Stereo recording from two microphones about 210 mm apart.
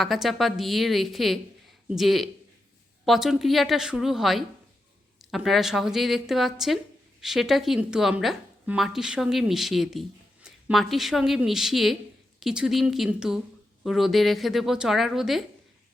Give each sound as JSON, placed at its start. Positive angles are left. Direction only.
{"t": 0.0, "sound": "a woman's voice", "side_deg": 0}